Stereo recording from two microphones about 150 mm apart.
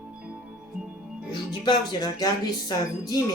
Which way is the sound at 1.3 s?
30° left (ahead or behind).